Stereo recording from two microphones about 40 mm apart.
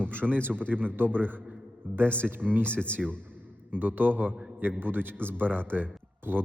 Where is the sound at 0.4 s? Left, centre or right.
Right.